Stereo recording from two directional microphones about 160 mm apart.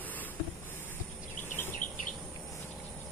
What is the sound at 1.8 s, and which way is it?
Bird, 55° left (ahead or behind).